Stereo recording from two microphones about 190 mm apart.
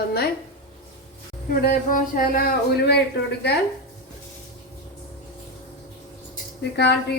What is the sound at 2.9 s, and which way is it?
Speech, 60° left (ahead or behind).